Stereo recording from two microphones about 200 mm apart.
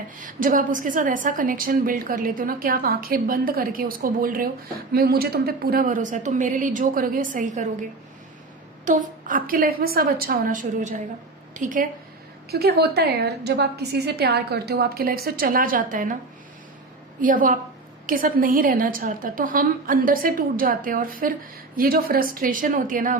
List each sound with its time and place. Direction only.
0.2 s a woman's voice: 40° right (ahead or behind)
12.5 s a woman's voice: 50° right (ahead or behind)
17.2 s a woman's voice: 40° right (ahead or behind)